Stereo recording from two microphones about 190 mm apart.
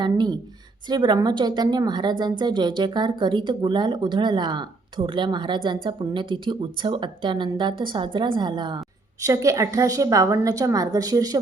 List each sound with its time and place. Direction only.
0.0 s a woman's voice: 25° right (ahead or behind)